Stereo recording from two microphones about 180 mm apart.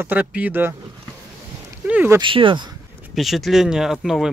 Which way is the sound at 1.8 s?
10° right (ahead or behind).